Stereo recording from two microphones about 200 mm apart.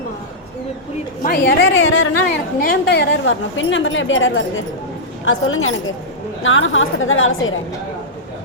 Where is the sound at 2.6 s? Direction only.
55° left (ahead or behind); by 4.4 s 70° left (ahead or behind).